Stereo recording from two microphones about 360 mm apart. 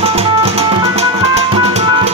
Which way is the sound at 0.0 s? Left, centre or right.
Centre.